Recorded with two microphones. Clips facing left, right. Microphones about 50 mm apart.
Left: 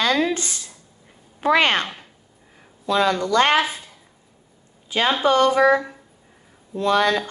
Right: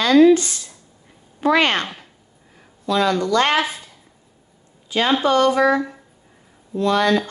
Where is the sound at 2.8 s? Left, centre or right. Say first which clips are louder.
Right 1 dB; left.